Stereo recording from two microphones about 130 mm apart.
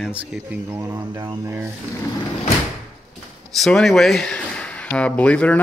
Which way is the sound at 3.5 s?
Centre (ahead or behind).